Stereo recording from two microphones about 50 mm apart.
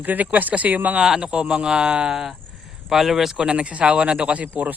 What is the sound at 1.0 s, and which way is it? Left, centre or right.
Speech, centre.